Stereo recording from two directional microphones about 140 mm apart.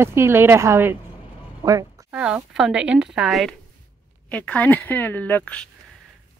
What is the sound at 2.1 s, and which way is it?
Speech, 5° right (ahead or behind).